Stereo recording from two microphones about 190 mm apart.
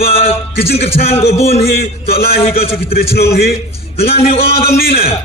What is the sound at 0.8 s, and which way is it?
Speech, 30° left (ahead or behind).